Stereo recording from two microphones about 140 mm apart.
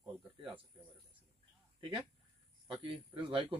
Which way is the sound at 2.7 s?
40° right (ahead or behind).